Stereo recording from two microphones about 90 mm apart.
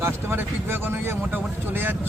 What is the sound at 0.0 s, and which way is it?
Speech, 25° right (ahead or behind).